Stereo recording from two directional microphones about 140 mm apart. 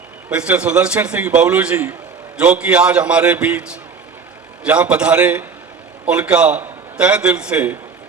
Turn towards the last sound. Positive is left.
turn(degrees=-10)  # may be behind; listen again after turning